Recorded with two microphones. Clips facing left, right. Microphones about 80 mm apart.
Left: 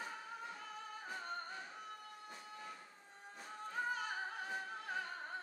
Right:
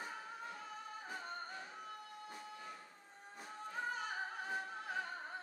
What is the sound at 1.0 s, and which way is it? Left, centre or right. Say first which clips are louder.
Music: left 2 dB; centre.